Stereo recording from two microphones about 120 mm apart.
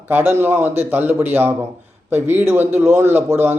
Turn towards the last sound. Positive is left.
turn(degrees=-15)  # may be behind; listen again after turning